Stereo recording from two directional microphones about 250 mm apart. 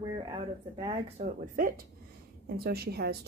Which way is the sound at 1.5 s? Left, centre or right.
Right.